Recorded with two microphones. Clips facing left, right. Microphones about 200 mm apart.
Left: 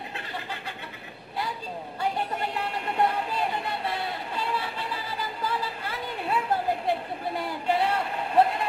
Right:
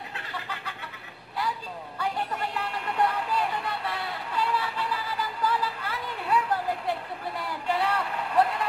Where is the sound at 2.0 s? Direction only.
25° left (ahead or behind).